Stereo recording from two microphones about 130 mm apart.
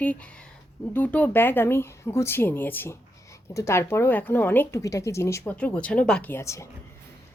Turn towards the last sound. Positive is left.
turn(degrees=20)  # may be behind; listen again after turning